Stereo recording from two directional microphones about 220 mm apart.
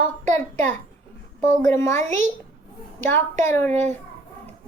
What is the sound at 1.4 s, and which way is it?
Speech, 35° right (ahead or behind).